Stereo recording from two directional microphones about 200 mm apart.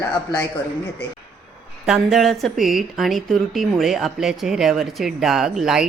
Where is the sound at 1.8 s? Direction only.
Centre (ahead or behind).